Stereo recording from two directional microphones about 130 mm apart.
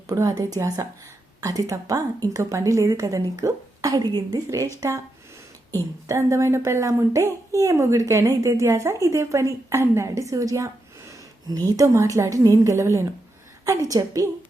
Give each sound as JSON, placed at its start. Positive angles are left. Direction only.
{"t": 0.1, "sound": "a woman's voice", "side_deg": -30}
{"t": 6.1, "sound": "a woman's voice", "side_deg": -20}